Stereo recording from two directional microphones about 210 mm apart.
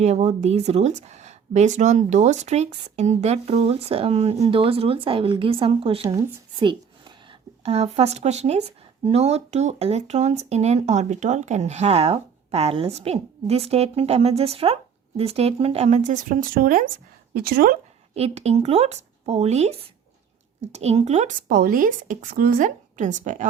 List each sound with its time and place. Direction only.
0.0 s a woman's voice: 35° right (ahead or behind)
18.1 s speech: 30° right (ahead or behind)